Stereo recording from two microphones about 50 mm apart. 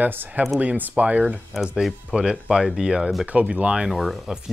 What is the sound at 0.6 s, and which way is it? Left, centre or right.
Speech, right.